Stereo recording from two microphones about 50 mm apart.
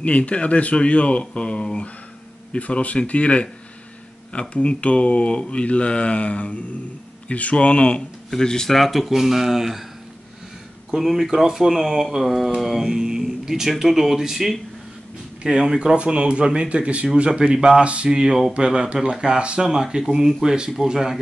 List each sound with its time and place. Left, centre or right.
0.0 s speech: left
8.3 s speech: centre
10.9 s speech: centre
15.6 s speech: centre